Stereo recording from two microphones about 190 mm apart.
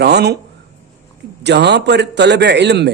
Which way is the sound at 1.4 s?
65° right (ahead or behind).